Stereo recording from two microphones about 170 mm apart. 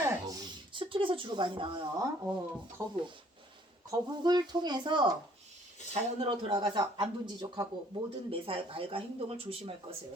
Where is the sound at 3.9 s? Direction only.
25° right (ahead or behind).